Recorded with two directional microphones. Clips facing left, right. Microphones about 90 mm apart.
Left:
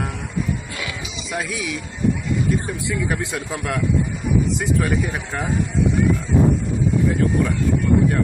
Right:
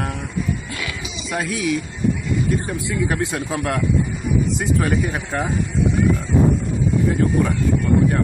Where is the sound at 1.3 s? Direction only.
Centre (ahead or behind).